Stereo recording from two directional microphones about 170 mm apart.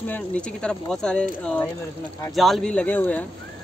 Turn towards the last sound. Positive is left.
turn(degrees=10)  # may be behind; listen again after turning